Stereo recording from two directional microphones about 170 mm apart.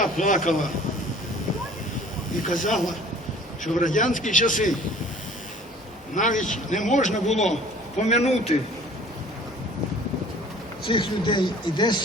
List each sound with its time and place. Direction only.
0.0 s a man's voice: 50° left (ahead or behind)
2.5 s a man's voice: 50° left (ahead or behind)
2.7 s a man's voice: centre (ahead or behind)
3.8 s a man's voice: 50° left (ahead or behind)
6.1 s a man's voice: 50° left (ahead or behind)
10.8 s speech: 30° left (ahead or behind)